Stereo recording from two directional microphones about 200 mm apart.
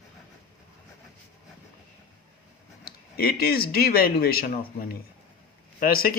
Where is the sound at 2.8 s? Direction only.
50° left (ahead or behind).